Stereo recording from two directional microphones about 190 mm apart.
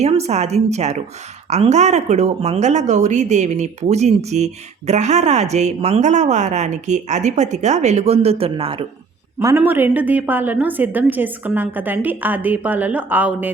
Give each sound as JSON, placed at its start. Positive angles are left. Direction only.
{"t": 0.0, "sound": "speech", "side_deg": -35}
{"t": 9.4, "sound": "a woman's voice", "side_deg": -15}